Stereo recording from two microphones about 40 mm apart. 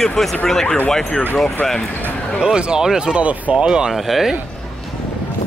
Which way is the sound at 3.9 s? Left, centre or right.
Centre.